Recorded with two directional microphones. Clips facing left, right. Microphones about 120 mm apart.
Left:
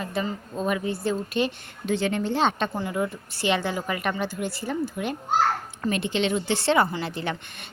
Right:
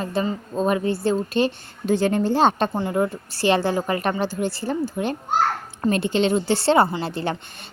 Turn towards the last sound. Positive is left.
turn(degrees=-35)  # may be behind; listen again after turning